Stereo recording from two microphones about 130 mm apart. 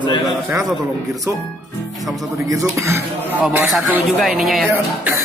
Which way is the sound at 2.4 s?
25° right (ahead or behind).